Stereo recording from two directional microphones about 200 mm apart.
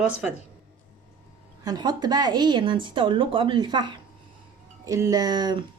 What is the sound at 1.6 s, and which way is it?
A woman's voice, 20° right (ahead or behind).